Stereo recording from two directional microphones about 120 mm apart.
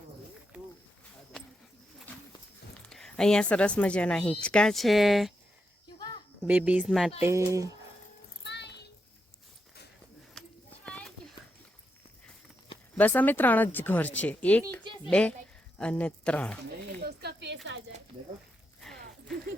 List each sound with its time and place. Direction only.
2.8 s a woman's voice: 5° left (ahead or behind)
6.4 s a woman's voice: 10° right (ahead or behind)
7.2 s speech: 20° right (ahead or behind)
10.8 s a sound: 10° left (ahead or behind)
13.0 s a woman's voice: 15° left (ahead or behind)
15.8 s a woman's voice: 10° left (ahead or behind)
18.8 s a sound: 5° left (ahead or behind)